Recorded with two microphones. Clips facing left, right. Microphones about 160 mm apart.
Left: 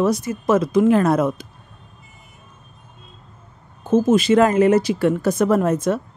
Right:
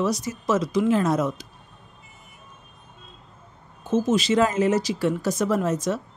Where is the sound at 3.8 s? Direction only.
50° left (ahead or behind).